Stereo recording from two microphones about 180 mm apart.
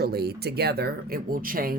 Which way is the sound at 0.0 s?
60° right (ahead or behind).